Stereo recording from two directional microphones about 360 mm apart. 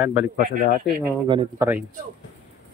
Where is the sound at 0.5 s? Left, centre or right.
Right.